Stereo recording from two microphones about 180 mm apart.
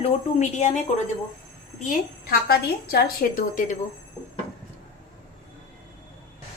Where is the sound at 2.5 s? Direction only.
55° left (ahead or behind).